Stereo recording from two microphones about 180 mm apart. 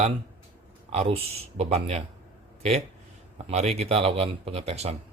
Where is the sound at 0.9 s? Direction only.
35° right (ahead or behind).